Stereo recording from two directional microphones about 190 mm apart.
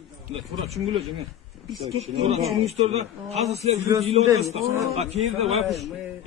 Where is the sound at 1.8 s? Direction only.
30° right (ahead or behind).